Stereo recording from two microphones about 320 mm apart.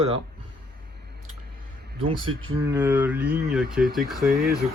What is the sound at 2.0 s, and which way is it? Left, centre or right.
Speech, centre.